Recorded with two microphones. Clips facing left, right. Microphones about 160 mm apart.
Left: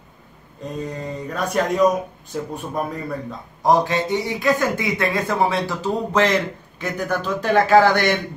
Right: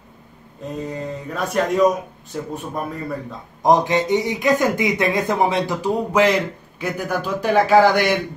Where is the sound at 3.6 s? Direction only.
20° right (ahead or behind).